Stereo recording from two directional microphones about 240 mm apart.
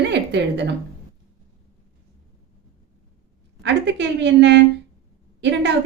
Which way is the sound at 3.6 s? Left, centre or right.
Right.